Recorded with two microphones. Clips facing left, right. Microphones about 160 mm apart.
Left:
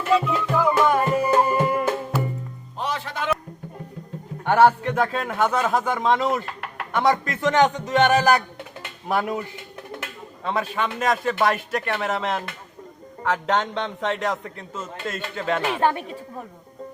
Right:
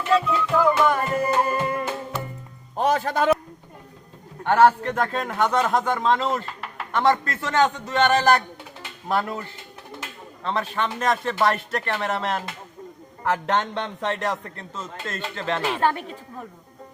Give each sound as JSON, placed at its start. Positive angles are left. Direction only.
{"t": 0.1, "sound": "music", "side_deg": 10}
{"t": 2.7, "sound": "music", "side_deg": -45}
{"t": 4.4, "sound": "a man's voice", "side_deg": 10}